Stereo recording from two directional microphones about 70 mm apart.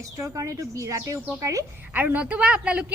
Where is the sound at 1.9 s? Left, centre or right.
Right.